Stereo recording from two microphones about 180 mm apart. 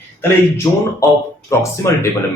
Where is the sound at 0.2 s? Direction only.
15° left (ahead or behind).